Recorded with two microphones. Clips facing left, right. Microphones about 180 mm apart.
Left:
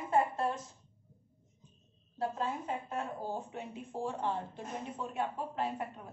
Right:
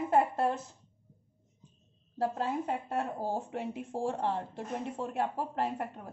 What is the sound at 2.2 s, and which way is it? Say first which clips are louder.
Speech: right 4 dB; 70° right (ahead or behind).